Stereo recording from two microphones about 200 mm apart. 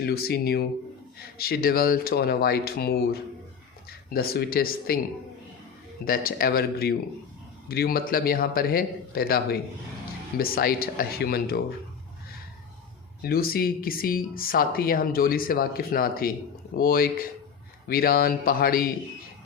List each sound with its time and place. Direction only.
0.0 s speech: 50° left (ahead or behind)
6.1 s speech: 45° left (ahead or behind)
13.2 s speech: 50° left (ahead or behind)